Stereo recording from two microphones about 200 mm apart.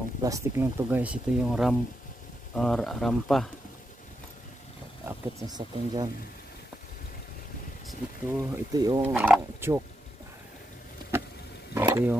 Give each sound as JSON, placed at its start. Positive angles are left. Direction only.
{"t": 0.2, "sound": "speech", "side_deg": -15}
{"t": 5.0, "sound": "speech", "side_deg": -20}
{"t": 8.3, "sound": "speech", "side_deg": -10}
{"t": 11.7, "sound": "a sound", "side_deg": -15}